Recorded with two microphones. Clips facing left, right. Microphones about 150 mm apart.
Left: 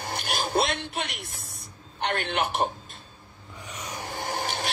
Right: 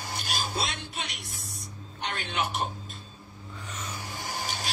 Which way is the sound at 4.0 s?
55° left (ahead or behind).